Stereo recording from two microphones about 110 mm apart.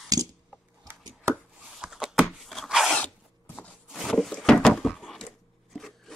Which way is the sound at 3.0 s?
15° left (ahead or behind).